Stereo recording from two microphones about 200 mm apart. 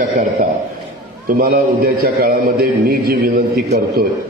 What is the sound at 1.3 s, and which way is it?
A man's voice, 45° right (ahead or behind).